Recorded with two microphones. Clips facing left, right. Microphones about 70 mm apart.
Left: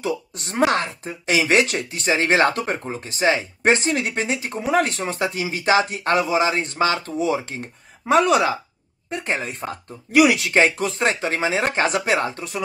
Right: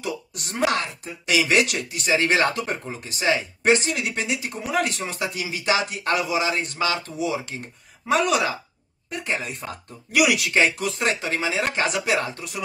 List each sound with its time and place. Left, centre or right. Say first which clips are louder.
0.0 s speech: left 5 dB; left